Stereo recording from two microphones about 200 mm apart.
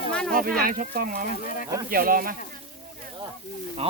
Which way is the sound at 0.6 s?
45° right (ahead or behind).